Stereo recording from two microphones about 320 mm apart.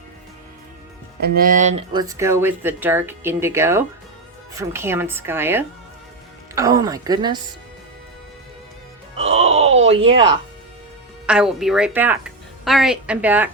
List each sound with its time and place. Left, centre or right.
1.2 s speech: right
9.1 s wail: centre
11.3 s a woman's voice: centre